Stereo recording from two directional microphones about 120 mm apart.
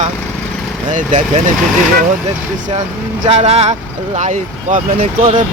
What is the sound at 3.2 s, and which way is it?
Speech, 60° right (ahead or behind).